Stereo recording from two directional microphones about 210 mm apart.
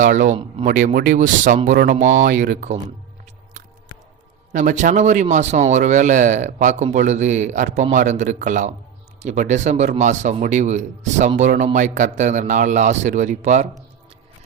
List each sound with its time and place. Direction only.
0.0 s a man's voice: 40° right (ahead or behind)
4.5 s a man's voice: 35° right (ahead or behind)